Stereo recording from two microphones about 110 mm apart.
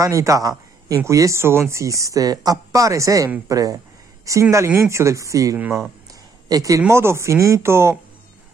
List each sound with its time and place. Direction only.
0.0 s speech: 30° right (ahead or behind)
5.6 s speech: 15° right (ahead or behind)
6.5 s speech: 30° right (ahead or behind)